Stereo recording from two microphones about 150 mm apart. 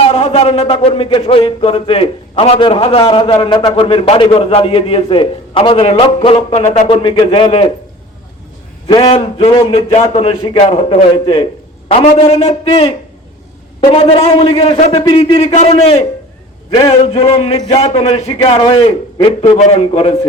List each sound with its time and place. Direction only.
0.0 s speech: 45° left (ahead or behind)
9.0 s a man's voice: 40° left (ahead or behind)